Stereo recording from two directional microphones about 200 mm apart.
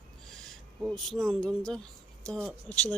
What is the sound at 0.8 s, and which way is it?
Speech, centre (ahead or behind).